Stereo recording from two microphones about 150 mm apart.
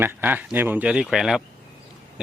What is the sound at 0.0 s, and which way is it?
Speech, 10° right (ahead or behind).